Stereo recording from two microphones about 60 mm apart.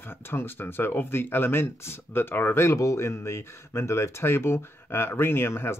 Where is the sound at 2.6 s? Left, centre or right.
Left.